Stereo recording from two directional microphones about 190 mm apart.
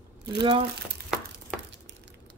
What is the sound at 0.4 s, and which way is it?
Speech, 25° right (ahead or behind).